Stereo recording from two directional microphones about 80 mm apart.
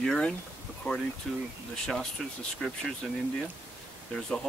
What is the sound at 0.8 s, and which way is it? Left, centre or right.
Speech, left.